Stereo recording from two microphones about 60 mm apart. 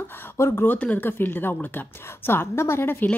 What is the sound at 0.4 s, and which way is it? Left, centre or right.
A woman's voice, left.